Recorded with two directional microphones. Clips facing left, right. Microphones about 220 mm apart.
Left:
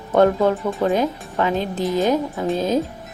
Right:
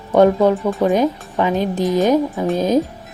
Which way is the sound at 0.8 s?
15° right (ahead or behind).